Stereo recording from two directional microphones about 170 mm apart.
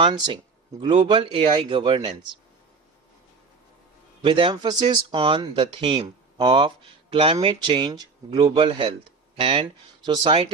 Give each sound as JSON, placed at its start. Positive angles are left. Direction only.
{"t": 0.0, "sound": "speech", "side_deg": -30}
{"t": 4.2, "sound": "speech", "side_deg": -30}